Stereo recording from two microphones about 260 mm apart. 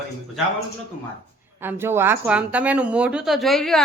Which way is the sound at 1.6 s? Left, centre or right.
Centre.